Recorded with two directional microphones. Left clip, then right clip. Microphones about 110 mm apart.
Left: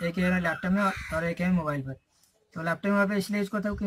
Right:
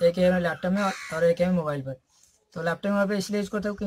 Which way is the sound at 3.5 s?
Centre (ahead or behind).